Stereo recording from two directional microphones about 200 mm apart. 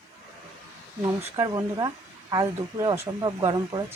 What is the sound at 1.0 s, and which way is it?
Speech, 15° right (ahead or behind).